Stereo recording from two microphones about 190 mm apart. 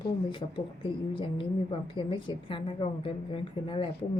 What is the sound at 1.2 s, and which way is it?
Speech, 25° left (ahead or behind).